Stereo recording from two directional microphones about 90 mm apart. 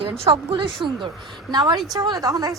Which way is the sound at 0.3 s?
65° right (ahead or behind).